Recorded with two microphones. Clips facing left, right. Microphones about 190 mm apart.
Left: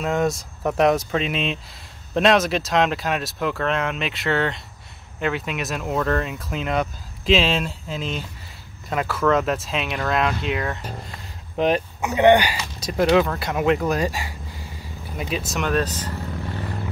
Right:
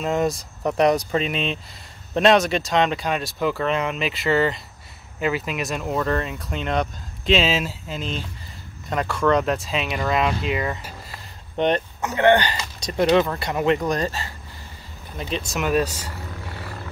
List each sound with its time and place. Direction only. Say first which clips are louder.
0.0 s speech: even; centre (ahead or behind)
12.1 s speech: left 2 dB; 15° left (ahead or behind); by 16.1 s 10° right (ahead or behind)